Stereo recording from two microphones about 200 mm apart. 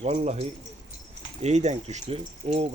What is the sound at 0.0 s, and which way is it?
A man's voice, 30° right (ahead or behind).